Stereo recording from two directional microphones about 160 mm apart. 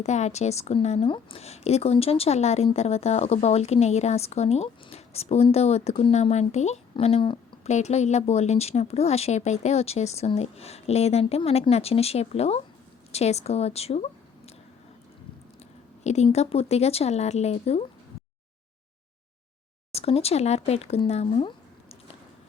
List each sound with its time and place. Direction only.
0.0 s a woman's voice: 45° left (ahead or behind)
16.0 s a woman's voice: 45° left (ahead or behind)
19.9 s a woman's voice: 40° left (ahead or behind)